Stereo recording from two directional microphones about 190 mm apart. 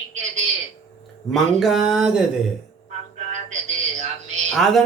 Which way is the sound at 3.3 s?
40° right (ahead or behind).